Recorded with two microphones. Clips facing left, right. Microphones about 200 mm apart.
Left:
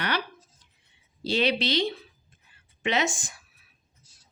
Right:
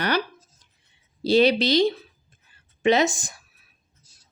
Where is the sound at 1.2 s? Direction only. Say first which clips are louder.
Right 7 dB; 40° right (ahead or behind).